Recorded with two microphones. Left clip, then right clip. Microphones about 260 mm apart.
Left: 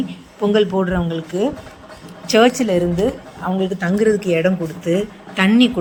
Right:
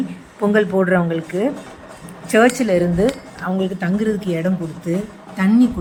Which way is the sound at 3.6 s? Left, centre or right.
Centre.